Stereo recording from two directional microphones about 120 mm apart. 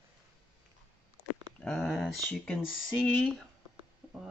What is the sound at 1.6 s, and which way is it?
Speech, 10° left (ahead or behind).